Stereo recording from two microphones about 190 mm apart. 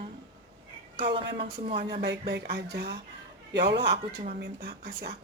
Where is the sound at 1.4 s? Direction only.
30° right (ahead or behind).